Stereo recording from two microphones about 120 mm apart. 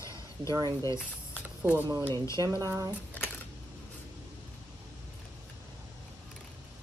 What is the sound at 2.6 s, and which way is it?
Speech, 30° right (ahead or behind).